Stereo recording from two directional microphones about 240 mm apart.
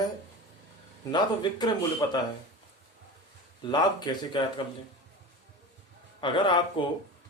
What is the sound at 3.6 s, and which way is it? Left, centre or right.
Speech, centre.